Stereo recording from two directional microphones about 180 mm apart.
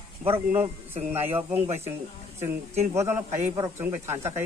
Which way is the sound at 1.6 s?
35° right (ahead or behind).